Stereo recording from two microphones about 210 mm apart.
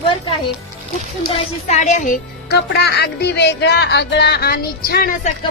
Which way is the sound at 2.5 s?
50° left (ahead or behind).